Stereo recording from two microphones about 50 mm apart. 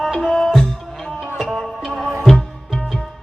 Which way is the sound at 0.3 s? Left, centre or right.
Centre.